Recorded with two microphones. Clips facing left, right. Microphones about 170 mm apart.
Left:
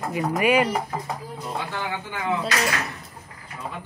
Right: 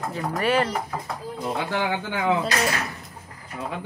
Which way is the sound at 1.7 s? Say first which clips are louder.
Right 5 dB; 85° right.